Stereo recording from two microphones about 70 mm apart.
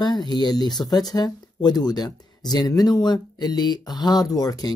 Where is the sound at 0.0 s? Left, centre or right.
Left.